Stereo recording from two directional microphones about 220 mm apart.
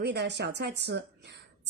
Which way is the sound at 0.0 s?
50° right (ahead or behind).